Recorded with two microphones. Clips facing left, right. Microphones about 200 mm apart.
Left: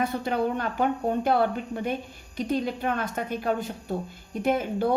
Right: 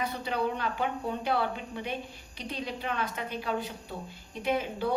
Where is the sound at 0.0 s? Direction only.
50° left (ahead or behind).